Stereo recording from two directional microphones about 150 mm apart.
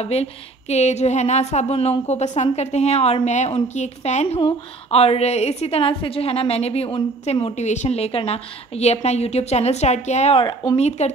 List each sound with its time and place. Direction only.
0.0 s speech: 45° left (ahead or behind)
4.4 s a woman's voice: 35° left (ahead or behind)
10.4 s speech: 20° left (ahead or behind)
10.8 s speech: 50° left (ahead or behind)